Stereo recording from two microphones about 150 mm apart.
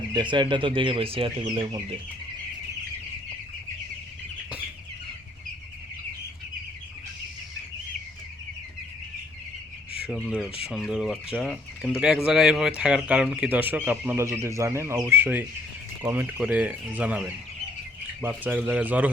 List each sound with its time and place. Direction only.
0.1 s speech: 30° right (ahead or behind)
10.1 s speech: 5° right (ahead or behind)